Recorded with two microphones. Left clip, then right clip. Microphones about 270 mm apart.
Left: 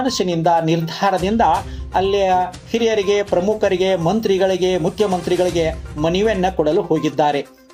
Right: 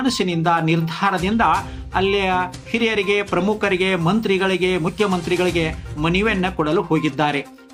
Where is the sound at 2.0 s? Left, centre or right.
Centre.